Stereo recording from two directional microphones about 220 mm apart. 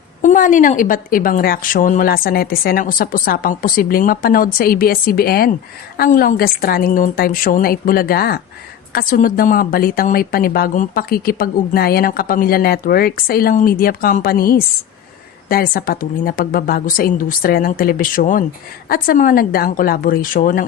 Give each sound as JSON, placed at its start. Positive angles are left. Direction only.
{"t": 0.2, "sound": "a woman's voice", "side_deg": 35}